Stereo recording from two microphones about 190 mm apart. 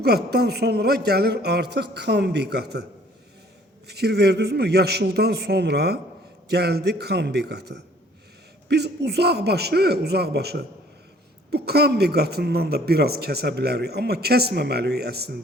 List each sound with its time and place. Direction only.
0.0 s speech: 60° right (ahead or behind)
3.8 s speech: 60° right (ahead or behind)